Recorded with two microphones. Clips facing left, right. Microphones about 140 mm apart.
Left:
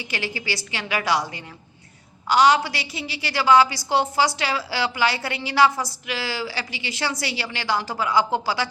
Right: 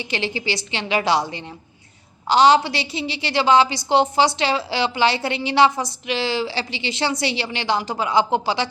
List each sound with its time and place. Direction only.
0.0 s a woman's voice: 25° right (ahead or behind)